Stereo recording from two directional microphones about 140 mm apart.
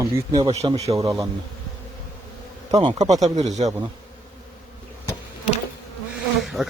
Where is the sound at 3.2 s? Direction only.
55° right (ahead or behind).